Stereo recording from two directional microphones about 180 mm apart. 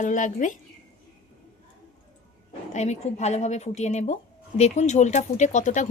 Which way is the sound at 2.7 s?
40° left (ahead or behind).